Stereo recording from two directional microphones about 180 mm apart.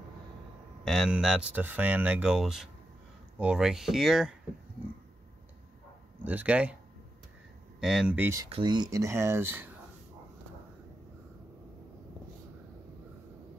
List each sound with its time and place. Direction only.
0.8 s speech: centre (ahead or behind)
6.2 s speech: 10° right (ahead or behind)
7.8 s speech: 5° right (ahead or behind)
8.5 s speech: 25° right (ahead or behind)